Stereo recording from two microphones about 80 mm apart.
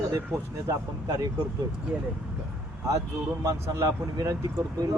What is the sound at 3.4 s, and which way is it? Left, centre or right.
Speech, right.